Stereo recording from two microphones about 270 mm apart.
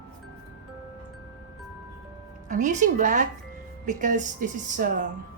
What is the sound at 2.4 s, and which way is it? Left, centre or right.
A woman's voice, right.